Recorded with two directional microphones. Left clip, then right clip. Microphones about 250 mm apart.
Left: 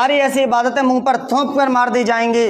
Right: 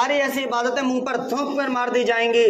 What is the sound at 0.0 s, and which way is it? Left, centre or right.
A man's voice, left.